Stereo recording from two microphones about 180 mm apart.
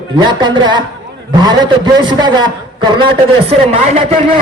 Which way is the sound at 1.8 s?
25° right (ahead or behind).